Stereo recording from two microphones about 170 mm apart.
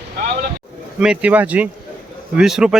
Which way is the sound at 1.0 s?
5° right (ahead or behind).